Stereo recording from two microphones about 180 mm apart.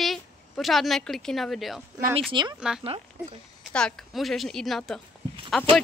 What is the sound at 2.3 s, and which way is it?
Speech, 25° right (ahead or behind).